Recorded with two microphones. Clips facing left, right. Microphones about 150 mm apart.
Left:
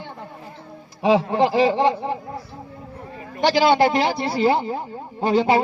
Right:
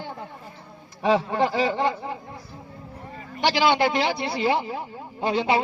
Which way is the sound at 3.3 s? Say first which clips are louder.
Left 4 dB; 45° left (ahead or behind).